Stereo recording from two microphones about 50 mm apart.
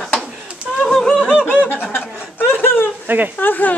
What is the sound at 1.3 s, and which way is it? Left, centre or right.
Snicker, centre.